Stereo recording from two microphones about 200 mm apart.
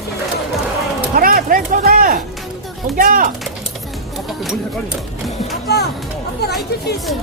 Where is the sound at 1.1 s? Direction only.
45° right (ahead or behind).